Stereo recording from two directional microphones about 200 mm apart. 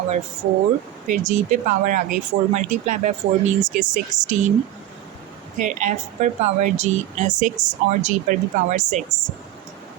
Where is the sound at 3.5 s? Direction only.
40° right (ahead or behind).